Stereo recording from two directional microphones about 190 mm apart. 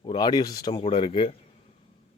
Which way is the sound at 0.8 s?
30° left (ahead or behind).